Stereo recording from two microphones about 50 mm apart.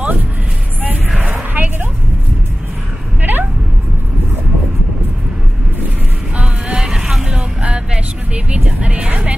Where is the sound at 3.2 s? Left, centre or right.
Right.